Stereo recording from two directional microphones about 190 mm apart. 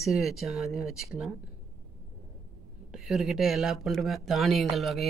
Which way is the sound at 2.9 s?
Centre (ahead or behind).